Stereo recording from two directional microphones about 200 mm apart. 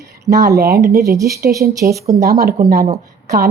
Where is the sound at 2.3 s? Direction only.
50° right (ahead or behind).